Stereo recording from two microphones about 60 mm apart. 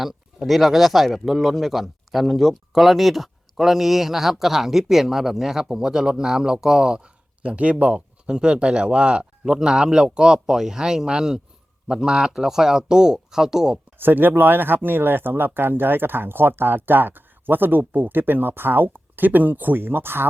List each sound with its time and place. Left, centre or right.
0.0 s speech: centre
14.0 s speech: right